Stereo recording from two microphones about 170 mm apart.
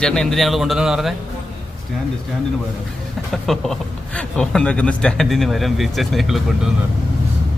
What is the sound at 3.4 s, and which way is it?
A man's voice, centre (ahead or behind).